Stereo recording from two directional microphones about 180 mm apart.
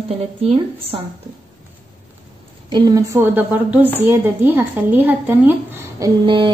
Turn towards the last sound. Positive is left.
turn(degrees=-30)  # may be behind; listen again after turning